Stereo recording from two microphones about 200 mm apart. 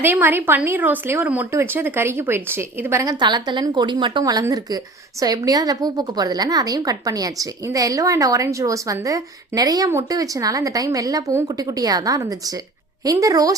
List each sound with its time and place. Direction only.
0.0 s a woman's voice: 10° right (ahead or behind)